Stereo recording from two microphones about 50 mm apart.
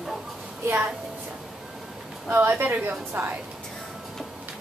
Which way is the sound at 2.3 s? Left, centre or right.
Right.